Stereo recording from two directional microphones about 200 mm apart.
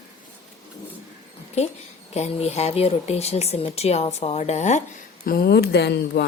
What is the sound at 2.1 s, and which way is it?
A woman's voice, 30° left (ahead or behind).